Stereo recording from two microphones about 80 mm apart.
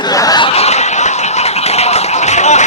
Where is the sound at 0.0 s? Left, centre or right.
Left.